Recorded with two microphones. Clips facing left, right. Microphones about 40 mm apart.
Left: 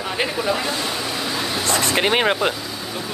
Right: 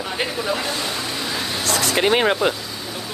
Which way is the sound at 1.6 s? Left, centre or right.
Left.